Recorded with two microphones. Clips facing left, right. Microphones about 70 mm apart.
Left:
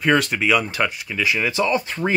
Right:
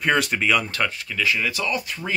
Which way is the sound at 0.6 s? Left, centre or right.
Centre.